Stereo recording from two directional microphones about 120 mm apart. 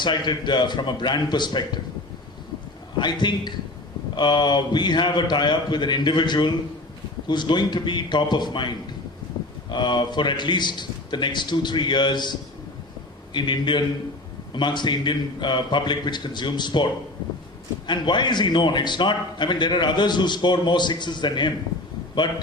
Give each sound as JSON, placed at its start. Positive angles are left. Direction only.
{"t": 0.0, "sound": "a man's voice", "side_deg": 40}
{"t": 3.0, "sound": "a man's voice", "side_deg": 40}